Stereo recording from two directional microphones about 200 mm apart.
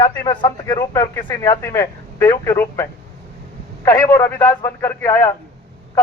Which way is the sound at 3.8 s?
15° left (ahead or behind).